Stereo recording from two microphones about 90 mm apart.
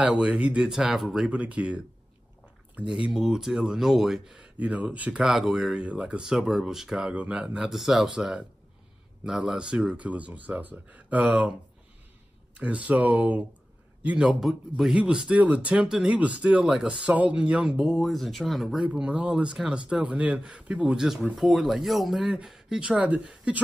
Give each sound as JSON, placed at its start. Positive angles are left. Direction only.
{"t": 0.0, "sound": "speech", "side_deg": -10}
{"t": 2.9, "sound": "speech", "side_deg": -5}
{"t": 4.4, "sound": "speech", "side_deg": -15}
{"t": 12.5, "sound": "speech", "side_deg": -15}
{"t": 18.9, "sound": "speech", "side_deg": -15}